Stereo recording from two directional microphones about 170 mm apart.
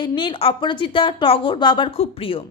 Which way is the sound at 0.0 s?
25° left (ahead or behind).